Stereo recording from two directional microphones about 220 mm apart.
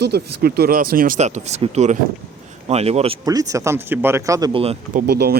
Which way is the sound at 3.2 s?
15° right (ahead or behind).